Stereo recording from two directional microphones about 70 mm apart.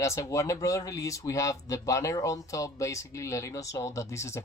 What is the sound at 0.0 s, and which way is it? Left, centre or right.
Speech, left.